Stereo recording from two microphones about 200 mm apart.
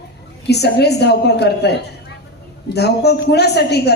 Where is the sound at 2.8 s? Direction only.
55° left (ahead or behind).